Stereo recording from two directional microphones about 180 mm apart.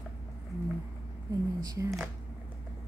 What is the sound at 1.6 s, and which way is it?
Speech, 20° right (ahead or behind).